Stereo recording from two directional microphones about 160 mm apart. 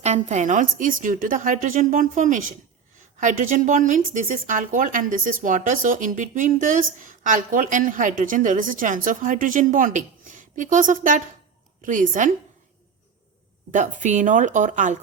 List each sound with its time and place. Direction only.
0.0 s a woman's voice: 45° right (ahead or behind)
13.7 s speech: 50° right (ahead or behind)